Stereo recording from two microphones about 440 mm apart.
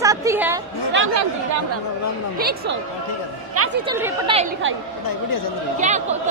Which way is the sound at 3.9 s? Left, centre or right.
Centre.